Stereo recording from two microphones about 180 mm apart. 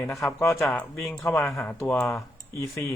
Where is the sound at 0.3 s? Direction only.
15° left (ahead or behind).